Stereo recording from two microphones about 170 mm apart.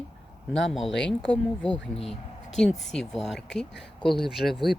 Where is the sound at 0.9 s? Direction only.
90° left.